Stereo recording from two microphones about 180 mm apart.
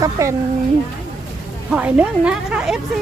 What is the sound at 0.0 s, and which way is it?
Speech, 15° right (ahead or behind).